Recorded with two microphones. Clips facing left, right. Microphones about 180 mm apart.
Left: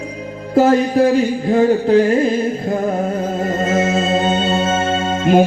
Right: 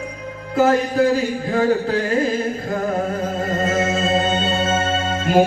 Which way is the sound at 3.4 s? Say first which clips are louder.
Left 3 dB; 25° left (ahead or behind).